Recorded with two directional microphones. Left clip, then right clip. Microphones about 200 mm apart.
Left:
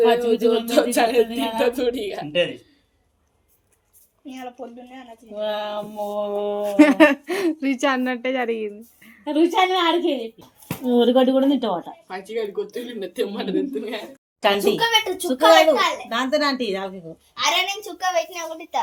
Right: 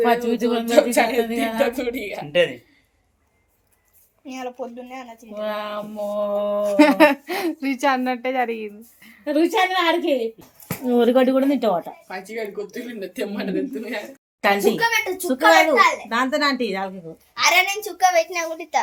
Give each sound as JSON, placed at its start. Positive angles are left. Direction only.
{"t": 0.0, "sound": "mantra", "side_deg": -25}
{"t": 0.6, "sound": "a woman's voice", "side_deg": 0}
{"t": 4.3, "sound": "a child's voice", "side_deg": -40}
{"t": 5.4, "sound": "mantra", "side_deg": -25}
{"t": 6.6, "sound": "speech", "side_deg": 5}
{"t": 9.2, "sound": "mantra", "side_deg": -25}
{"t": 10.8, "sound": "speech", "side_deg": -15}
{"t": 12.0, "sound": "speech", "side_deg": -5}
{"t": 17.3, "sound": "a child's voice", "side_deg": -35}